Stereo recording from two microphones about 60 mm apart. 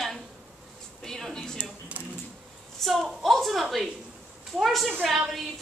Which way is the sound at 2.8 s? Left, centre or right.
Centre.